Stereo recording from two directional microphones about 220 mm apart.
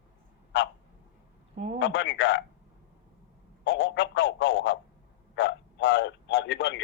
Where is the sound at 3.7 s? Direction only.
55° left (ahead or behind).